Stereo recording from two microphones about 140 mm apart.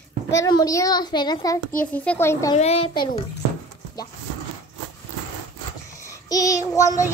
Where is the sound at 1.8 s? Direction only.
10° left (ahead or behind).